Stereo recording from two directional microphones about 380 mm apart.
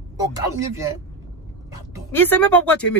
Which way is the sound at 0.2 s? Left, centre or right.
Centre.